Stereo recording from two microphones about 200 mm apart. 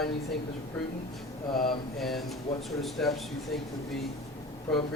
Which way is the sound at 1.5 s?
45° left (ahead or behind).